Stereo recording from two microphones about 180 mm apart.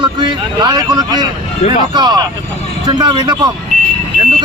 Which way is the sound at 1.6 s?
35° left (ahead or behind).